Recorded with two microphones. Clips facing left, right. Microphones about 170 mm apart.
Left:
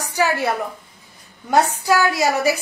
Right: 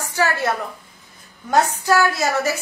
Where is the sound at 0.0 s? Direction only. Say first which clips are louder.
Left 1 dB; 15° left (ahead or behind).